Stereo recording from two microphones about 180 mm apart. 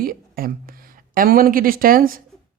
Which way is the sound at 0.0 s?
55° right (ahead or behind).